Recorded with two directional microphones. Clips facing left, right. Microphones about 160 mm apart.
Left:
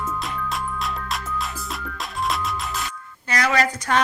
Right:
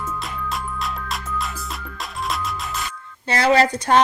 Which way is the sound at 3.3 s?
30° right (ahead or behind).